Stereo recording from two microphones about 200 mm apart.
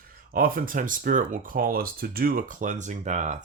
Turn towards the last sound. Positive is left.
turn(degrees=-35)  # may be behind; listen again after turning